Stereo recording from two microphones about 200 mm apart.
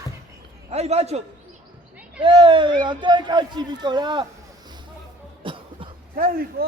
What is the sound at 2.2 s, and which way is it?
A man's voice, 25° right (ahead or behind).